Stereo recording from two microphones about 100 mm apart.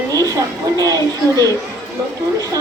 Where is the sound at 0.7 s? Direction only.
35° right (ahead or behind).